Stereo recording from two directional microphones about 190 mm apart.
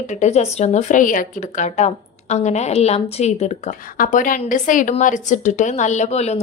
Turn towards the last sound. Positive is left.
turn(degrees=35)  # may be behind; listen again after turning